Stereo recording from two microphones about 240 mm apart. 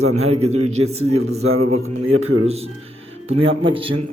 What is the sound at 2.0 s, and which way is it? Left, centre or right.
Speech, right.